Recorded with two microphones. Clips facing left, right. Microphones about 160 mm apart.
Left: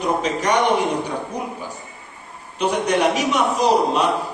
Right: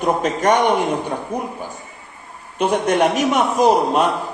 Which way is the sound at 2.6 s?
50° right (ahead or behind).